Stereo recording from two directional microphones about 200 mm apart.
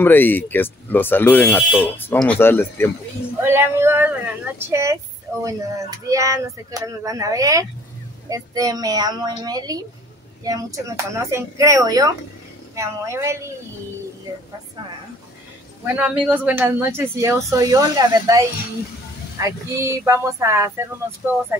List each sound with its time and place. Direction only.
0.0 s speech: 10° left (ahead or behind)
3.4 s a woman's voice: 10° right (ahead or behind)
15.8 s a woman's voice: 10° right (ahead or behind)